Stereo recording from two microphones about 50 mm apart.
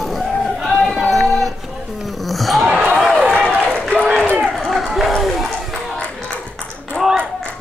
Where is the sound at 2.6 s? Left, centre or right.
Right.